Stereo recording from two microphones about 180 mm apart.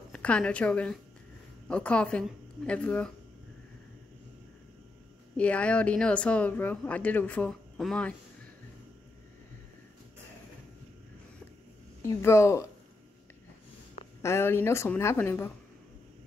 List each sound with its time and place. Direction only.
0.1 s a woman's voice: 5° left (ahead or behind)
5.4 s speech: 5° left (ahead or behind)
12.0 s speech: 15° left (ahead or behind)
14.2 s speech: 15° left (ahead or behind)